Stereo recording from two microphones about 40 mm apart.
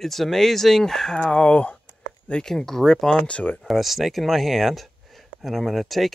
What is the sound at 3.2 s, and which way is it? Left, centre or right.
Speech, left.